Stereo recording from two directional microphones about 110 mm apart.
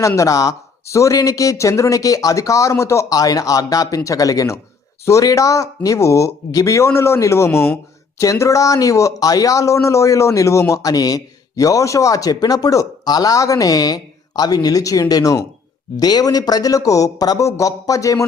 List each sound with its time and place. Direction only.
0.2 s speech: 30° left (ahead or behind)